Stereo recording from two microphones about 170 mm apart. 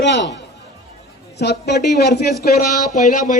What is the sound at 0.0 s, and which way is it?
Speech, 90° left.